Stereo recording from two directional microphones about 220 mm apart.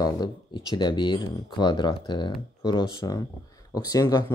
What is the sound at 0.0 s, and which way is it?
Speech, 15° left (ahead or behind).